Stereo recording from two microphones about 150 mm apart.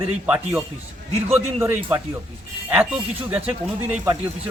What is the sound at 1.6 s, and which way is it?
A man's voice, 10° right (ahead or behind).